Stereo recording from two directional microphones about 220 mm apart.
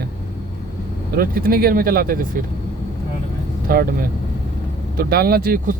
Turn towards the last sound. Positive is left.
turn(degrees=-40)  # may be behind; listen again after turning